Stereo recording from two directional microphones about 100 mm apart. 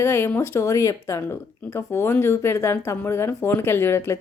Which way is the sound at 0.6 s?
30° left (ahead or behind).